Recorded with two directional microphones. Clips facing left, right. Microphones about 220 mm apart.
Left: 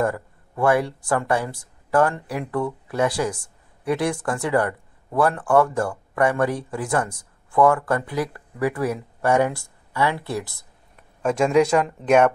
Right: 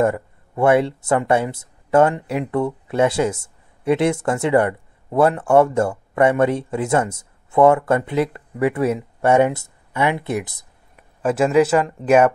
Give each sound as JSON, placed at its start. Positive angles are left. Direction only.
{"t": 0.0, "sound": "speech", "side_deg": -25}
{"t": 11.0, "sound": "speech", "side_deg": -5}